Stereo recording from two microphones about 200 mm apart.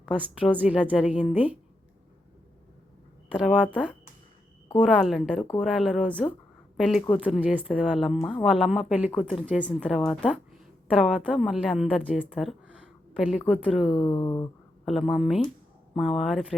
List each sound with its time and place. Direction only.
0.1 s a woman's voice: 5° right (ahead or behind)
3.3 s a woman's voice: centre (ahead or behind)
13.9 s speech: 15° left (ahead or behind)
14.8 s a woman's voice: centre (ahead or behind)